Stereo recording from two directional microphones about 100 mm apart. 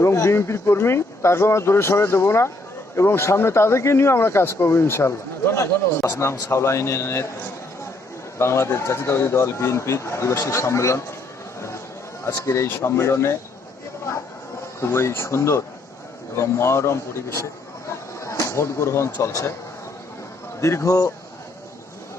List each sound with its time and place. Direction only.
0.0 s speech: 25° left (ahead or behind)
8.4 s speech: 25° left (ahead or behind)
12.5 s speech: 30° left (ahead or behind)
14.8 s speech: 25° left (ahead or behind)
20.6 s speech: 30° left (ahead or behind)